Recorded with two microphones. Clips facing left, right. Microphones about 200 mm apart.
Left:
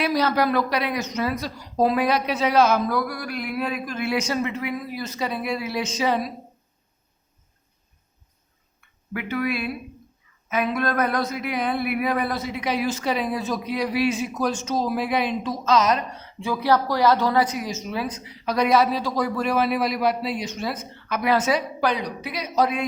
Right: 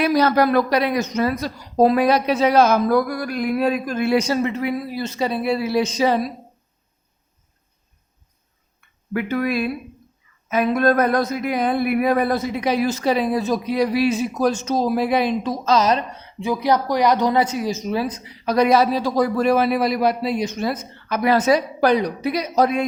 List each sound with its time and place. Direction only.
0.0 s speech: 45° right (ahead or behind)
9.1 s speech: 40° right (ahead or behind)
16.4 s speech: 15° right (ahead or behind); by 22.9 s 40° right (ahead or behind)